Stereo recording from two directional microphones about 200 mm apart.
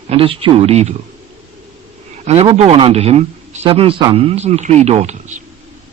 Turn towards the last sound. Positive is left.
turn(degrees=-35)  # may be behind; listen again after turning